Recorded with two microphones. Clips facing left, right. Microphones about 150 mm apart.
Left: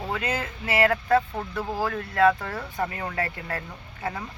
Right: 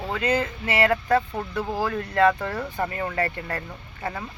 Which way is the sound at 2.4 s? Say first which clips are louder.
Right 2 dB; centre (ahead or behind).